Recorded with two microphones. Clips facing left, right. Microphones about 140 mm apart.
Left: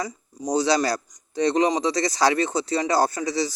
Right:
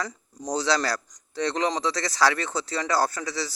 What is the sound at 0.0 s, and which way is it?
A man's voice, 15° left (ahead or behind).